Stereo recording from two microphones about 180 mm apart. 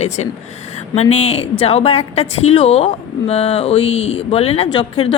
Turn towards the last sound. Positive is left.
turn(degrees=30)  # may be behind; listen again after turning